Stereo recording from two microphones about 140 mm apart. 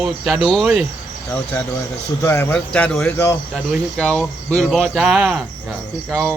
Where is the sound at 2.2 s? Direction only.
15° left (ahead or behind).